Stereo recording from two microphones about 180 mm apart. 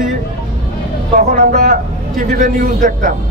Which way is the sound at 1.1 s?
50° right (ahead or behind).